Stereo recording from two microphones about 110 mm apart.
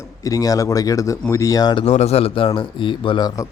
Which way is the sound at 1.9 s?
85° left.